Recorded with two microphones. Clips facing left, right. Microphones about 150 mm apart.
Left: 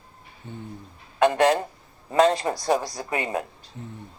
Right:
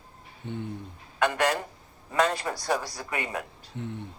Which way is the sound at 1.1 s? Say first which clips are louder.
Left 6 dB; 30° left (ahead or behind).